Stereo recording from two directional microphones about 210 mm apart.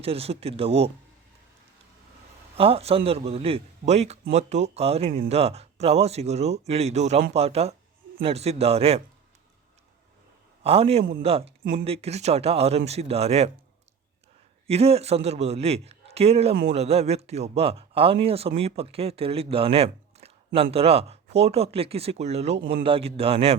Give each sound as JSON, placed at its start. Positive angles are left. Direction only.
{"t": 0.0, "sound": "speech", "side_deg": -30}
{"t": 2.6, "sound": "speech", "side_deg": -25}
{"t": 10.6, "sound": "a man's voice", "side_deg": -30}
{"t": 11.6, "sound": "speech", "side_deg": -45}
{"t": 11.9, "sound": "speech", "side_deg": -30}
{"t": 14.7, "sound": "speech", "side_deg": -30}
{"t": 22.5, "sound": "speech", "side_deg": -50}
{"t": 22.8, "sound": "speech", "side_deg": -25}